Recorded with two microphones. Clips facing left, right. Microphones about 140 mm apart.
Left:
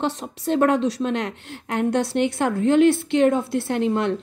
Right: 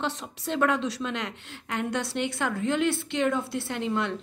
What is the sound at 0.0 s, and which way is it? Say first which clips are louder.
Speech: left 6 dB; 45° left (ahead or behind).